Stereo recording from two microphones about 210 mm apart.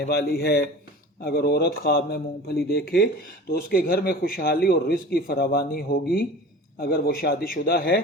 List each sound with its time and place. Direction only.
0.0 s a man's voice: 50° left (ahead or behind)